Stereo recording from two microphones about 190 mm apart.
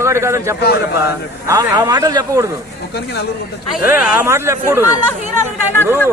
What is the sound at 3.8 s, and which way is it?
A man's voice, 10° right (ahead or behind).